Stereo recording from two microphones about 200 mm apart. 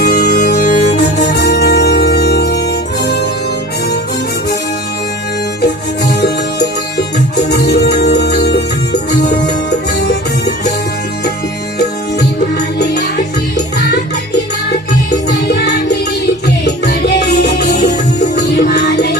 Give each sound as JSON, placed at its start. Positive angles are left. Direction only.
{"t": 0.0, "sound": "music", "side_deg": 50}
{"t": 6.1, "sound": "music", "side_deg": 55}
{"t": 12.5, "sound": "music", "side_deg": 55}
{"t": 15.3, "sound": "music", "side_deg": 60}